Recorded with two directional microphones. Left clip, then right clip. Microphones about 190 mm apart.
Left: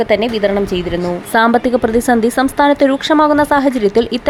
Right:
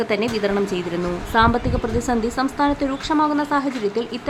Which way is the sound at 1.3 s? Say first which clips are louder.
Left 6 dB; 30° left (ahead or behind).